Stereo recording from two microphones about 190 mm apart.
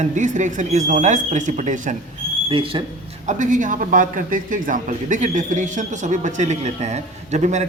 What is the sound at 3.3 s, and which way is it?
A man's voice, 40° right (ahead or behind).